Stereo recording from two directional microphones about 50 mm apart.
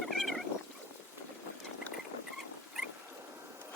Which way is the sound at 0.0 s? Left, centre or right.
Centre.